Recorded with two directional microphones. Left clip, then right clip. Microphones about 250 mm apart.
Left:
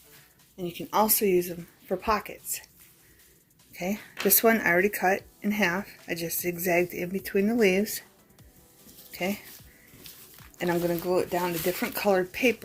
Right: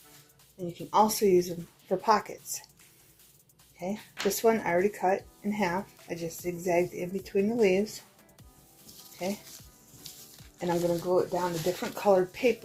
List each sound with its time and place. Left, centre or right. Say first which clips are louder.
0.7 s speech: right 1 dB; left; by 2.4 s centre
3.8 s speech: left 3 dB; left
10.0 s music: right 2 dB; centre
10.6 s speech: left 1 dB; left